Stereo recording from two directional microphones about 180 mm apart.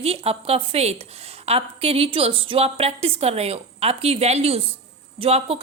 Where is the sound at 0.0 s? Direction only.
35° right (ahead or behind).